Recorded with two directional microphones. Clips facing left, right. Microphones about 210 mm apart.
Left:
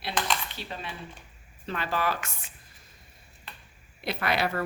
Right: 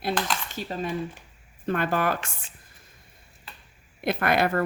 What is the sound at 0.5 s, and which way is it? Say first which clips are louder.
Speech: right 9 dB; 45° right (ahead or behind).